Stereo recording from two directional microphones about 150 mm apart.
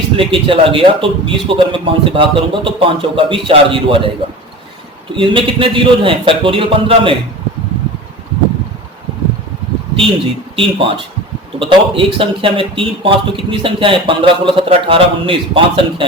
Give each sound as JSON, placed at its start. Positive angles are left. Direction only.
{"t": 0.2, "sound": "a man's voice", "side_deg": -35}
{"t": 5.1, "sound": "a man's voice", "side_deg": -35}
{"t": 10.5, "sound": "a man's voice", "side_deg": -35}